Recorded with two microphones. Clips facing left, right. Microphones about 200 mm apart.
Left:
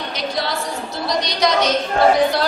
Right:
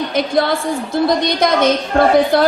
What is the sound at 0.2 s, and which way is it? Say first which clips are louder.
A woman's voice: right 8 dB; 55° right (ahead or behind).